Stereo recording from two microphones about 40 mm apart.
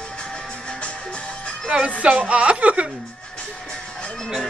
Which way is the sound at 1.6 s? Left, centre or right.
Right.